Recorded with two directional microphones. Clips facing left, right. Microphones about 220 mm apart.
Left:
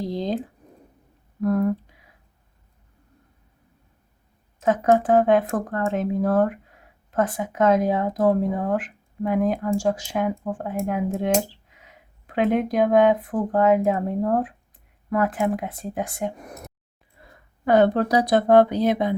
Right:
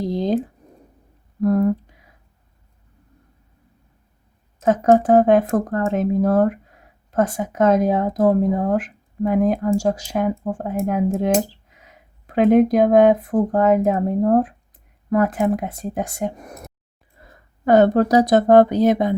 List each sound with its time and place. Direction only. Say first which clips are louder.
0.1 s a sound: right 5 dB; 45° right (ahead or behind)
1.4 s speech: right 4 dB; 40° right (ahead or behind)
4.6 s speech: right 4 dB; 45° right (ahead or behind)
17.7 s speech: right 4 dB; 45° right (ahead or behind)